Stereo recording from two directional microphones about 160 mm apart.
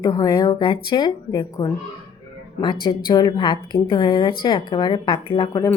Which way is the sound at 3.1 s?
25° left (ahead or behind).